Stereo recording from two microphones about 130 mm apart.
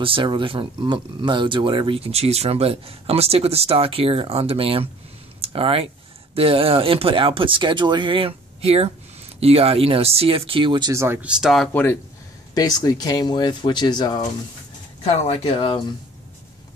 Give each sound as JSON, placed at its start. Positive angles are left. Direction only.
{"t": 0.0, "sound": "speech", "side_deg": -40}
{"t": 10.9, "sound": "speech", "side_deg": -20}
{"t": 11.1, "sound": "speech", "side_deg": -5}
{"t": 11.7, "sound": "speech", "side_deg": 15}
{"t": 12.5, "sound": "speech", "side_deg": 30}
{"t": 15.0, "sound": "speech", "side_deg": 50}